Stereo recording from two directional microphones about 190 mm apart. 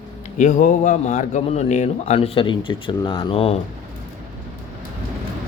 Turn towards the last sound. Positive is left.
turn(degrees=30)  # may be behind; listen again after turning